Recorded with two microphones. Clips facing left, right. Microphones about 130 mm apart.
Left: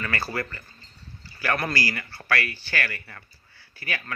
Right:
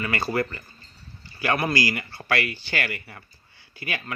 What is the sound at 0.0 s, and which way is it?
Speech, 15° right (ahead or behind).